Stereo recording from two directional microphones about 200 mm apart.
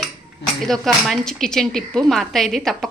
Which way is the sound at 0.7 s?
Centre (ahead or behind).